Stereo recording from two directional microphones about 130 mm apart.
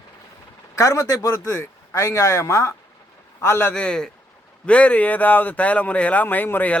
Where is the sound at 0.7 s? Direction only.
25° left (ahead or behind).